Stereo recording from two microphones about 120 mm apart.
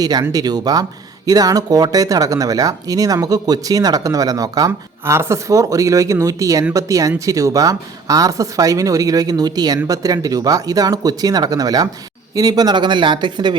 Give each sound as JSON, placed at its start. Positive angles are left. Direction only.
{"t": 0.0, "sound": "speech", "side_deg": -30}